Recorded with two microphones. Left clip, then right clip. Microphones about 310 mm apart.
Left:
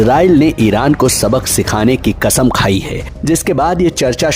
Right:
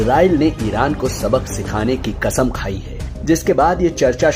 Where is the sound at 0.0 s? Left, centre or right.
Left.